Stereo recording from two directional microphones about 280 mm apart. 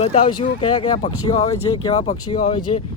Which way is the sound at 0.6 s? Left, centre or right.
Centre.